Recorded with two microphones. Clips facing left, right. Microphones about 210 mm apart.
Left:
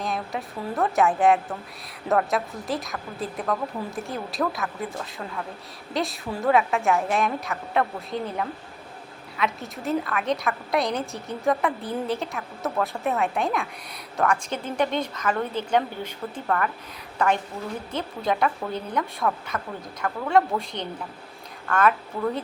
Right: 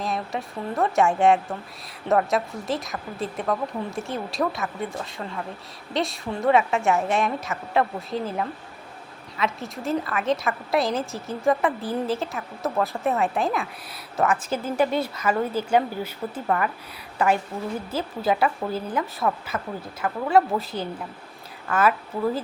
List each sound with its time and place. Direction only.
0.0 s a woman's voice: centre (ahead or behind)